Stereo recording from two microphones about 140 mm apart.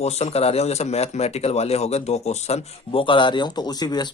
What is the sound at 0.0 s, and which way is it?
Speech, 50° left (ahead or behind).